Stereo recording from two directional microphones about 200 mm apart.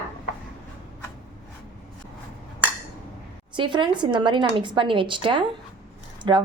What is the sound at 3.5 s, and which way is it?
A woman's voice, 25° right (ahead or behind).